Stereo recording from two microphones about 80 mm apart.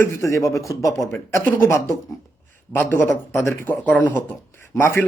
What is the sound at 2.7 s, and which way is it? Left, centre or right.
Speech, left.